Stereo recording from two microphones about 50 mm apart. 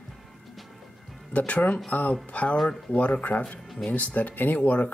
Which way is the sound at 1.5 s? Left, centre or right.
Left.